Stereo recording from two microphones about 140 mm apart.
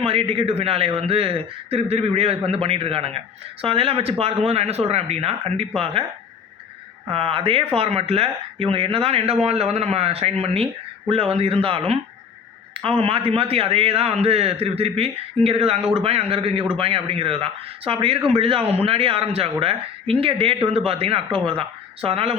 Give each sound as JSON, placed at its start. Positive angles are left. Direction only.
{"t": 0.0, "sound": "speech", "side_deg": -45}
{"t": 7.1, "sound": "speech", "side_deg": -40}